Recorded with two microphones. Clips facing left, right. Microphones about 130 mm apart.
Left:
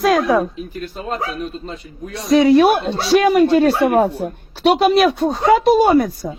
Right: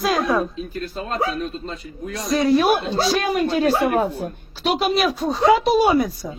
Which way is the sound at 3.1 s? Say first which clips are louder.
Left 11 dB; 70° left (ahead or behind).